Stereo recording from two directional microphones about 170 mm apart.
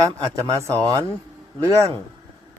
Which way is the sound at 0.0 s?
20° right (ahead or behind).